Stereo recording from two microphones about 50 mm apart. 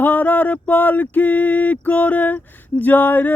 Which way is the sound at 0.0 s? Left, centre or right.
Left.